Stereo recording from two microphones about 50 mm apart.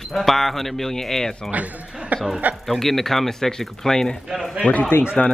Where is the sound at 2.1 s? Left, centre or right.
Right.